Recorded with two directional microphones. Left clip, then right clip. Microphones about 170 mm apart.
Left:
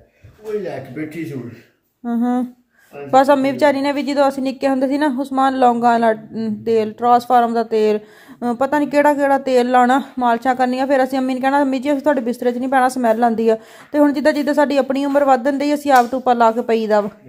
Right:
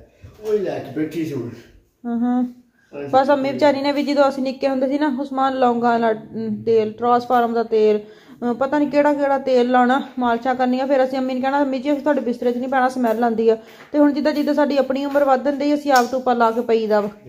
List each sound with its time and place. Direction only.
2.0 s a woman's voice: 30° left (ahead or behind)